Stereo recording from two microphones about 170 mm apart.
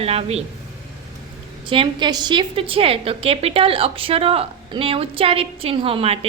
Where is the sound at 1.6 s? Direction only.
30° right (ahead or behind).